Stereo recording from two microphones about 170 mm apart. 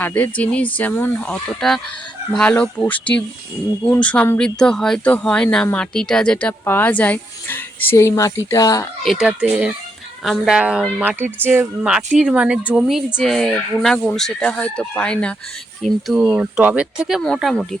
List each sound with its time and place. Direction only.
0.0 s speech: 10° left (ahead or behind)
9.0 s speech: 5° right (ahead or behind)